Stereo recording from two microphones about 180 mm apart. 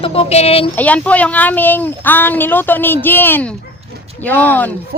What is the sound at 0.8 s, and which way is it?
A woman's voice, 10° left (ahead or behind).